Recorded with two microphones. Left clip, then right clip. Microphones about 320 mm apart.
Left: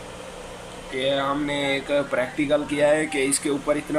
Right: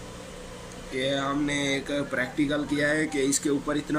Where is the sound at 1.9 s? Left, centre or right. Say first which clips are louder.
Left 6 dB; left.